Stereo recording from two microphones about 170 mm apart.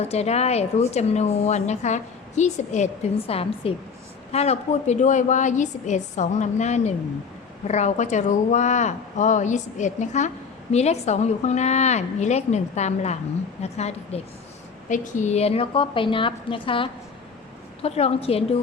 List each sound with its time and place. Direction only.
0.0 s a woman's voice: 40° left (ahead or behind)